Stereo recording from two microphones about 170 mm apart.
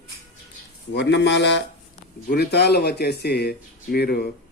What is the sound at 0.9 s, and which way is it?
Speech, 90° left.